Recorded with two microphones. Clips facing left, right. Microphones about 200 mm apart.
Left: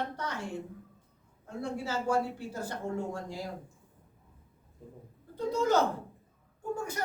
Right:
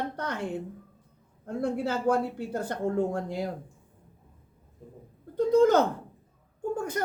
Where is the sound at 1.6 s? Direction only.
60° right (ahead or behind).